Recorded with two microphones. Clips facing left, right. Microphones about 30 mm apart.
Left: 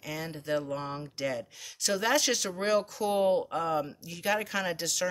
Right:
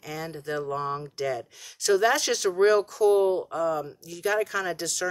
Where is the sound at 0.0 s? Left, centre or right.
Centre.